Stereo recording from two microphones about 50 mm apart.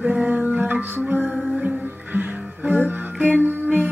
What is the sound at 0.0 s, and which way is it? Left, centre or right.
Music, right.